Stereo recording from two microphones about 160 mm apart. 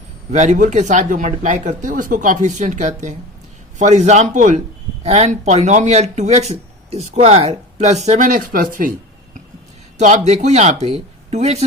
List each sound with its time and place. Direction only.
0.3 s speech: 50° right (ahead or behind)
10.0 s speech: 45° right (ahead or behind)